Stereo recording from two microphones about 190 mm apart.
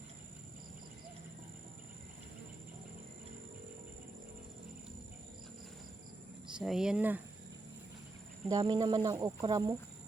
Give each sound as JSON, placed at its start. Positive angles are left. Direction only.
{"t": 6.6, "sound": "speech", "side_deg": -5}
{"t": 8.4, "sound": "speech", "side_deg": -20}